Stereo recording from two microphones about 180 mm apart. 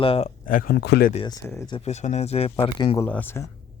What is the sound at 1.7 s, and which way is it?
Speech, 35° left (ahead or behind).